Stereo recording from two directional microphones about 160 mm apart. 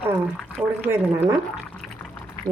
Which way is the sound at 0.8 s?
10° right (ahead or behind).